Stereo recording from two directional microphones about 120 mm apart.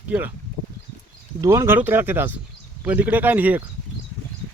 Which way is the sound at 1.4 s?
20° right (ahead or behind).